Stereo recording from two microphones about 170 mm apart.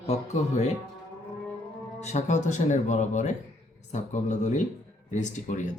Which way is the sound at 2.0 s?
40° left (ahead or behind).